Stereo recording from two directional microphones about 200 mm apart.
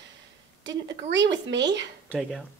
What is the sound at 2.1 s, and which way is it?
Speech, centre (ahead or behind).